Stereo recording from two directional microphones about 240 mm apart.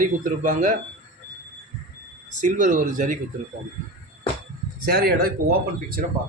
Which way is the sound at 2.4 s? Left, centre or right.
Right.